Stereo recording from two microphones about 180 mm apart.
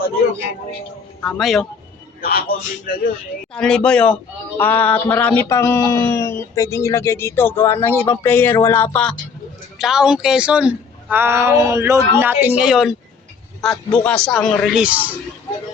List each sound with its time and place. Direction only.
1.2 s a man's voice: 5° left (ahead or behind)
2.2 s speech: 55° left (ahead or behind)
3.5 s a man's voice: 5° left (ahead or behind)